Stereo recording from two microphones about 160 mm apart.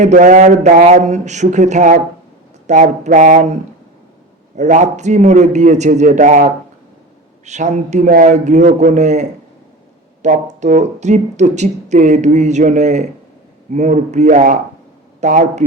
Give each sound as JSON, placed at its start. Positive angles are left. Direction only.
{"t": 0.0, "sound": "speech", "side_deg": -50}
{"t": 4.5, "sound": "speech", "side_deg": -50}
{"t": 10.4, "sound": "speech", "side_deg": -45}